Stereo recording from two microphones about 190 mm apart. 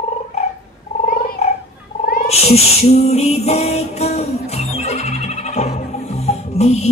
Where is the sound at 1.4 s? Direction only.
35° left (ahead or behind).